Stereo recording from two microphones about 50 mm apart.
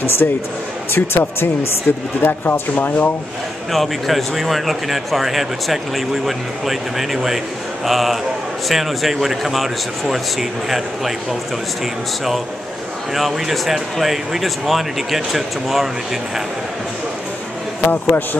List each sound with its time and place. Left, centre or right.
0.2 s speech: left
1.9 s speech: left
3.7 s speech: centre
13.1 s speech: centre
17.8 s speech: left